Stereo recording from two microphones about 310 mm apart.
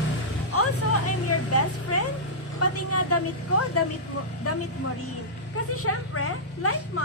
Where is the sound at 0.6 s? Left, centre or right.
Left.